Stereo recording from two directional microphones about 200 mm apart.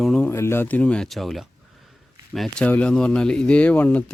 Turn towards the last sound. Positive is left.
turn(degrees=5)  # may be behind; listen again after turning